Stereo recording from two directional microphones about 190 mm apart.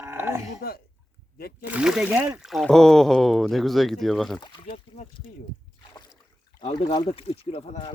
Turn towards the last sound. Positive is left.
turn(degrees=35)  # may be behind; listen again after turning